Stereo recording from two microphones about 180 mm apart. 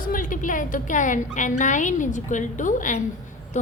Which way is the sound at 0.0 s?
50° left (ahead or behind).